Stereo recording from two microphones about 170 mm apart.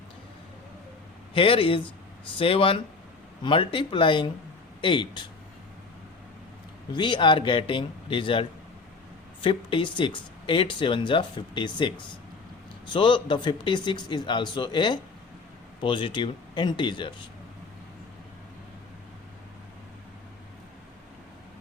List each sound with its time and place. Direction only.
1.3 s a man's voice: 30° left (ahead or behind)
6.9 s speech: 25° left (ahead or behind)